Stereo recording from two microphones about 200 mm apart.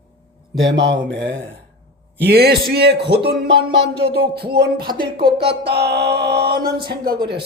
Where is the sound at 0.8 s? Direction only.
65° right (ahead or behind).